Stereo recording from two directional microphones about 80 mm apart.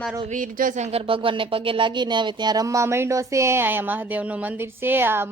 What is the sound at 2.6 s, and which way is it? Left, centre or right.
Speech, right.